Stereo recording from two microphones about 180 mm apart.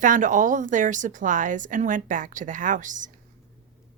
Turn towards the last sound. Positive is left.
turn(degrees=-45)  # may be behind; listen again after turning